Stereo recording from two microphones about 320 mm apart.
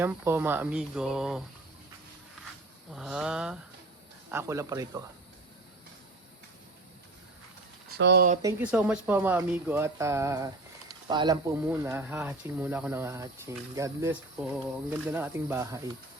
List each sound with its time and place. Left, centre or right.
0.0 s speech: centre
2.9 s speech: centre
7.9 s speech: right
8.4 s speech: centre